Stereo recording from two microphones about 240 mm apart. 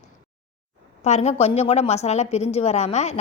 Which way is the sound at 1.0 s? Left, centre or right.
Left.